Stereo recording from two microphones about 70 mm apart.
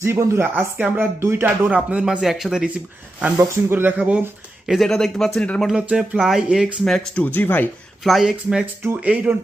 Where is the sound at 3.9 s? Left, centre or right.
Right.